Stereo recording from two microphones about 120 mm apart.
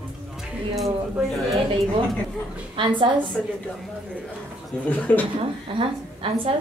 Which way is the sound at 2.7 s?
45° right (ahead or behind).